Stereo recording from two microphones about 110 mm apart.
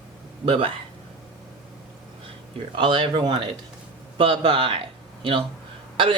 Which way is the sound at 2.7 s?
55° right (ahead or behind).